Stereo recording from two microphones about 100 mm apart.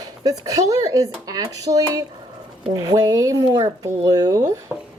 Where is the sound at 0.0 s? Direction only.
40° right (ahead or behind).